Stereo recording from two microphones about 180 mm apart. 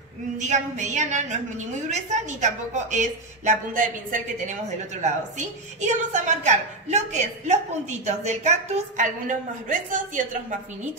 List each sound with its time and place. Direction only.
0.4 s a woman's voice: 40° right (ahead or behind)